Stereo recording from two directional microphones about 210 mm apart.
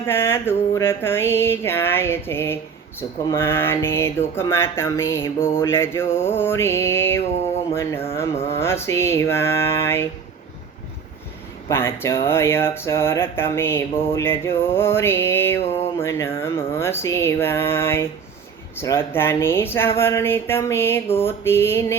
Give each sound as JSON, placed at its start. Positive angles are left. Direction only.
{"t": 0.0, "sound": "speech", "side_deg": 10}
{"t": 11.7, "sound": "speech", "side_deg": 10}